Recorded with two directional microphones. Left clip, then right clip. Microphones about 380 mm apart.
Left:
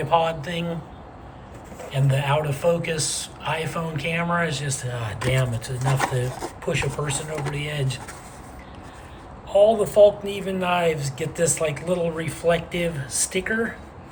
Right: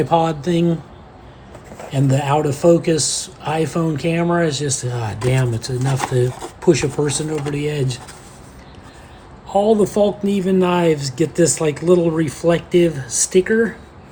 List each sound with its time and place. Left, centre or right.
0.1 s speech: centre
1.9 s speech: centre
9.5 s a woman's voice: right
9.8 s speech: centre